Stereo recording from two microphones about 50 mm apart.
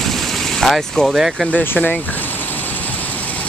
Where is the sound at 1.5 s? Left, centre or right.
Left.